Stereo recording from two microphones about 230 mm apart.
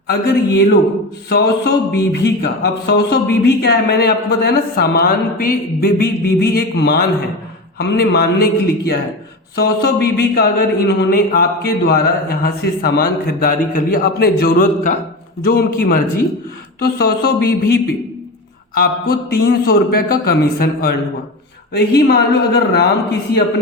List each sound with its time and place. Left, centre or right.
0.1 s music: left
9.6 s a man's voice: left
16.8 s music: left
18.7 s a man's voice: left
21.7 s music: left